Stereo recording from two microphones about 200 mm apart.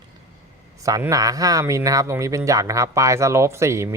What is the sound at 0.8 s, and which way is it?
Speech, 15° right (ahead or behind).